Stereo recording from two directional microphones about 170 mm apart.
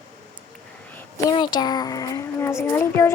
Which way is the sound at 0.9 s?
10° left (ahead or behind).